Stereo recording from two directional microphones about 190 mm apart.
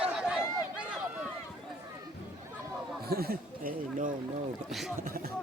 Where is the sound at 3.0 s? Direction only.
55° right (ahead or behind).